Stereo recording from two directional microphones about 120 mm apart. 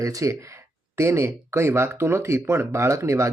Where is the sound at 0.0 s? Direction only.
25° right (ahead or behind).